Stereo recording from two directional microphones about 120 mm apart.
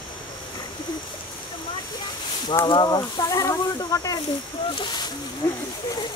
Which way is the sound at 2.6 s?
40° left (ahead or behind).